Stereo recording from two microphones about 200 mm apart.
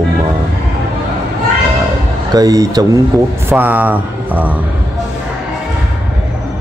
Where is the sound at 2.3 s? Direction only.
20° right (ahead or behind).